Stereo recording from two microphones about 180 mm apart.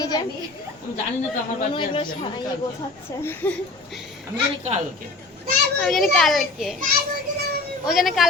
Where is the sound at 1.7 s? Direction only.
25° left (ahead or behind).